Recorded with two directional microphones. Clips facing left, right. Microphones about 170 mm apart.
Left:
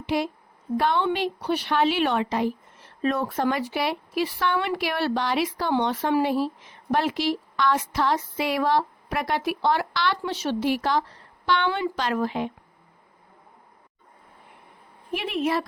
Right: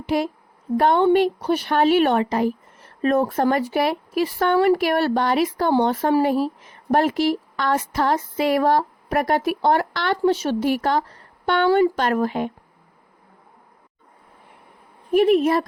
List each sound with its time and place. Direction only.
0.0 s speech: 50° right (ahead or behind)
15.1 s speech: 45° right (ahead or behind)